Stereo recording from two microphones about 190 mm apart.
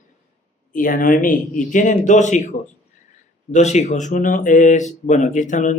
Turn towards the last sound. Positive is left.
turn(degrees=40)  # may be behind; listen again after turning